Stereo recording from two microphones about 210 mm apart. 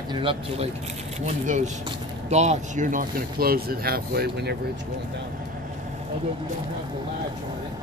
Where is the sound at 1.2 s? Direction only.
35° right (ahead or behind).